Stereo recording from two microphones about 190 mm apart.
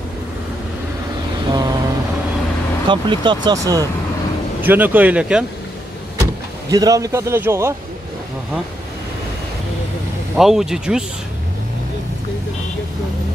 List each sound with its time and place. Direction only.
1.5 s vehicle: 20° right (ahead or behind)
2.9 s a man's voice: 25° right (ahead or behind); by 5.4 s 5° right (ahead or behind)
6.7 s a man's voice: 20° right (ahead or behind)
10.3 s speech: centre (ahead or behind)